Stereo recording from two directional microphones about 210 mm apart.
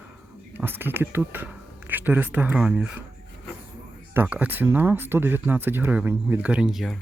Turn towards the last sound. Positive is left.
turn(degrees=0)  # may be behind; listen again after turning